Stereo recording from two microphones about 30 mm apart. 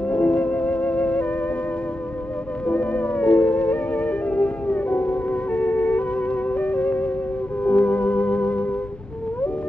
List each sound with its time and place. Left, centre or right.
0.1 s music: left
2.6 s music: left
7.6 s theremin: left